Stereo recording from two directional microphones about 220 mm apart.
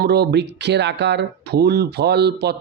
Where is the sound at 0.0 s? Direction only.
45° right (ahead or behind).